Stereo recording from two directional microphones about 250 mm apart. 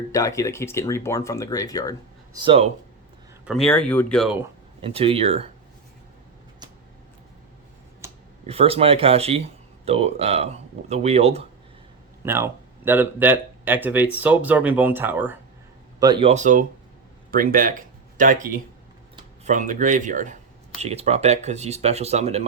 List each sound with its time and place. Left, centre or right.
0.1 s speech: centre
2.3 s speech: centre
3.4 s speech: centre
4.8 s speech: right
8.0 s a sound: centre
8.4 s speech: right
12.2 s speech: centre; by 22.4 s right